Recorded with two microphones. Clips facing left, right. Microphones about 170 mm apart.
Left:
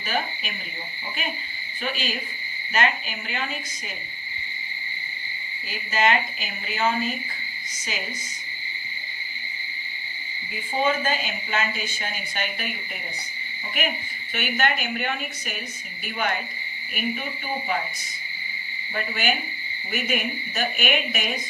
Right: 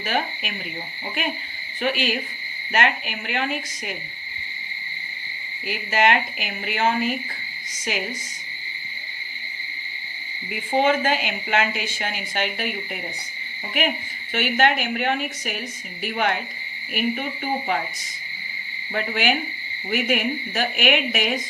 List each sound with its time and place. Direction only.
0.0 s a woman's voice: 65° right (ahead or behind)
1.8 s a woman's voice: 70° right (ahead or behind)
5.6 s a woman's voice: 70° right (ahead or behind)
10.8 s a woman's voice: 75° right (ahead or behind)
14.3 s a woman's voice: 70° right (ahead or behind)
16.9 s a woman's voice: 60° right (ahead or behind)
18.9 s a woman's voice: 70° right (ahead or behind); by 21.4 s 85° right